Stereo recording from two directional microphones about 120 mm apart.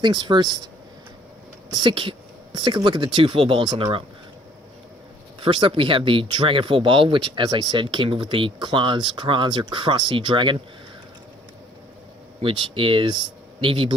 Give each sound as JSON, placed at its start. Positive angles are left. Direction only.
{"t": 0.0, "sound": "speech", "side_deg": -40}
{"t": 1.7, "sound": "speech", "side_deg": -40}
{"t": 5.4, "sound": "speech", "side_deg": -45}
{"t": 12.4, "sound": "speech", "side_deg": -45}